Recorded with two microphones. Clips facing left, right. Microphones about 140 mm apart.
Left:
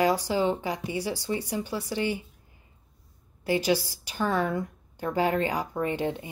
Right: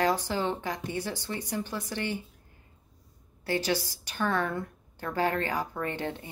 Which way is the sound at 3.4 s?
15° left (ahead or behind).